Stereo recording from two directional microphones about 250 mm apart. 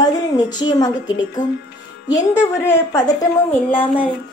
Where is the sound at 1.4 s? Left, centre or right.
Left.